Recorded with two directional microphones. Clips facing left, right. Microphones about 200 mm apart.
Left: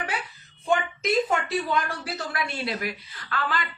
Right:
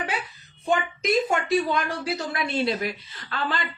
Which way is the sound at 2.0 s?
20° right (ahead or behind).